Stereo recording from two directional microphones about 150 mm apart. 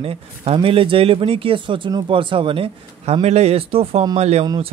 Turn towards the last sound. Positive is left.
turn(degrees=-45)  # may be behind; listen again after turning